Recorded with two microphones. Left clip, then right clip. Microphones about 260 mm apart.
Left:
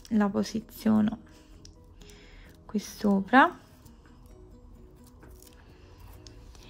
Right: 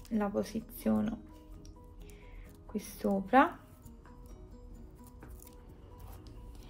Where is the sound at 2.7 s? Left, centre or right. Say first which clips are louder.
Left 5 dB; left.